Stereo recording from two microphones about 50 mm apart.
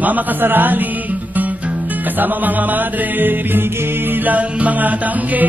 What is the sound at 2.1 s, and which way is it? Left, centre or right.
Music, right.